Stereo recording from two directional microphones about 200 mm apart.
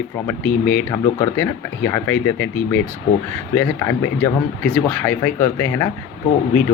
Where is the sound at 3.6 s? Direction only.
15° left (ahead or behind).